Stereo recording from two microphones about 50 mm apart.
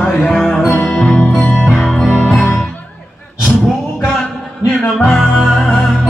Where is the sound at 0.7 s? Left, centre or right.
Left.